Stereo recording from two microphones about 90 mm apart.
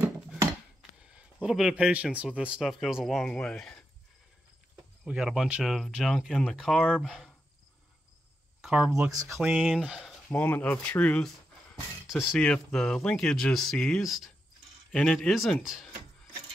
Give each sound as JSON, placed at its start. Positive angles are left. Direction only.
{"t": 1.1, "sound": "a sound", "side_deg": -5}
{"t": 2.1, "sound": "speech", "side_deg": -10}
{"t": 5.0, "sound": "speech", "side_deg": -10}
{"t": 8.6, "sound": "speech", "side_deg": -10}
{"t": 9.1, "sound": "speech", "side_deg": -40}
{"t": 9.4, "sound": "speech", "side_deg": -5}
{"t": 10.3, "sound": "speech", "side_deg": 20}
{"t": 12.1, "sound": "speech", "side_deg": 0}
{"t": 12.4, "sound": "speech", "side_deg": 15}
{"t": 12.7, "sound": "speech", "side_deg": 5}
{"t": 14.0, "sound": "speech", "side_deg": 0}
{"t": 14.9, "sound": "speech", "side_deg": 10}
{"t": 15.1, "sound": "speech", "side_deg": 0}